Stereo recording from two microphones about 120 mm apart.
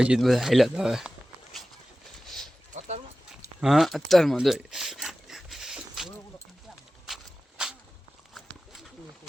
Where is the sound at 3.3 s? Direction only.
Centre (ahead or behind).